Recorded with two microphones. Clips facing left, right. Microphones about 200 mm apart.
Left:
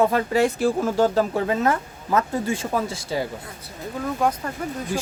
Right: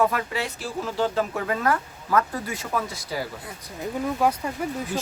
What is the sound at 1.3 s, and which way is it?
Speech, 25° left (ahead or behind).